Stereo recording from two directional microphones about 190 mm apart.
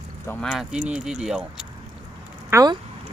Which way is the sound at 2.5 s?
15° right (ahead or behind).